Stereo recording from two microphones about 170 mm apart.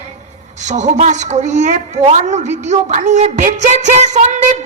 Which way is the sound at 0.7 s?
45° right (ahead or behind).